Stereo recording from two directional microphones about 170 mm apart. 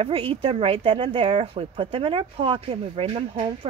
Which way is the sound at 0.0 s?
35° right (ahead or behind).